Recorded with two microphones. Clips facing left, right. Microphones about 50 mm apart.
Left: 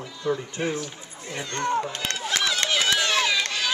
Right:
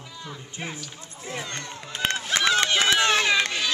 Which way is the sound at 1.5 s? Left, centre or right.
Left.